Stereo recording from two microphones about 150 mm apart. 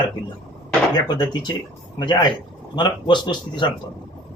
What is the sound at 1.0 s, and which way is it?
Speech, 30° left (ahead or behind).